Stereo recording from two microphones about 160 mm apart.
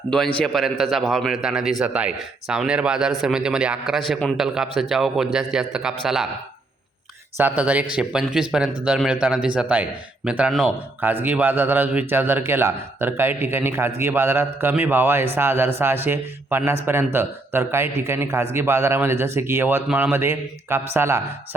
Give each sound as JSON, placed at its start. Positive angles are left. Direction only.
{"t": 0.1, "sound": "a man's voice", "side_deg": 5}
{"t": 7.3, "sound": "speech", "side_deg": -10}